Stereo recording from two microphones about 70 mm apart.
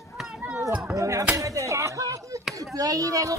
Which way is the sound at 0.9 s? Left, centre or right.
Right.